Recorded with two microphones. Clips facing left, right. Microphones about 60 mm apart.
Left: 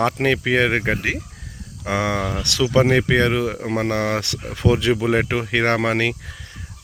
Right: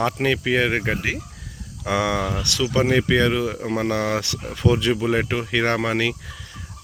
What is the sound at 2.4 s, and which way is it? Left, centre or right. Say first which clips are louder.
Speech: left 6 dB; left.